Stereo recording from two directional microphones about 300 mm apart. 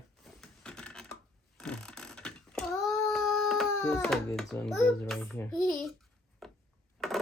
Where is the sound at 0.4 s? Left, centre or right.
Centre.